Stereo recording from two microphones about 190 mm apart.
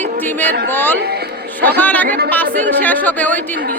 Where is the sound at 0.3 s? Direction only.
10° left (ahead or behind).